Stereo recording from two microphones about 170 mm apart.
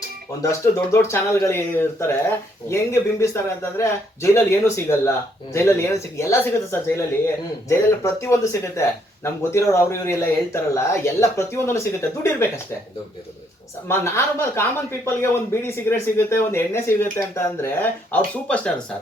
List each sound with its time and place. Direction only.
0.4 s speech: 15° left (ahead or behind)
13.8 s speech: 15° left (ahead or behind)